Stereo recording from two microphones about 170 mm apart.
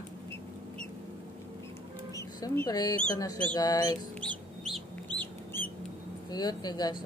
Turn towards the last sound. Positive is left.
turn(degrees=25)  # may be behind; listen again after turning